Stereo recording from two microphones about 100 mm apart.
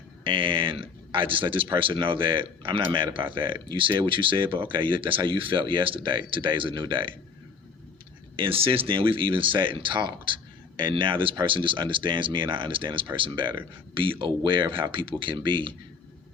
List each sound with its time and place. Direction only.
0.3 s speech: 55° right (ahead or behind)
8.4 s speech: 65° right (ahead or behind)